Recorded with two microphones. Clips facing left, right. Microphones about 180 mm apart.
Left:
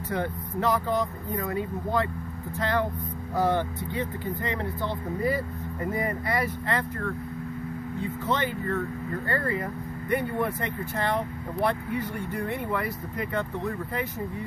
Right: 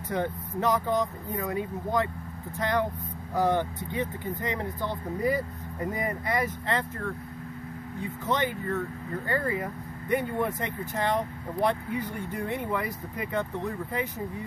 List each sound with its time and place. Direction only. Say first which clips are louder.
0.1 s speech: even; 20° right (ahead or behind)